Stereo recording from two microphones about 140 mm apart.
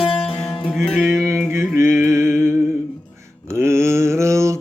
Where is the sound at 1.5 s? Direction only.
20° right (ahead or behind).